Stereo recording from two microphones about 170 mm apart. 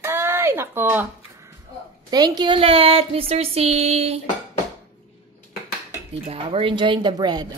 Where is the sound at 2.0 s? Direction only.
25° right (ahead or behind).